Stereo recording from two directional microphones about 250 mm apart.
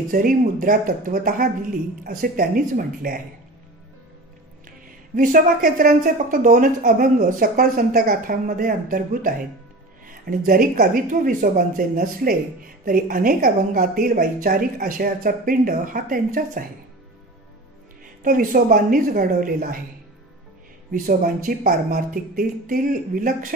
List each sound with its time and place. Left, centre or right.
0.1 s speech: right
5.1 s speech: right
18.2 s speech: right
20.9 s speech: right